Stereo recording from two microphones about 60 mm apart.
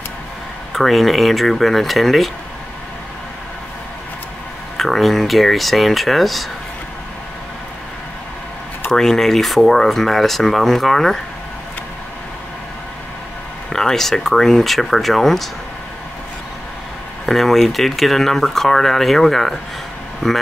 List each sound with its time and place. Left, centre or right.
0.7 s speech: centre
4.7 s speech: centre
8.9 s speech: centre
13.7 s speech: centre
17.3 s speech: centre